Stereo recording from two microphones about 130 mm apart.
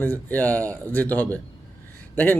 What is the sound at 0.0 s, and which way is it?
A man's voice, 15° left (ahead or behind).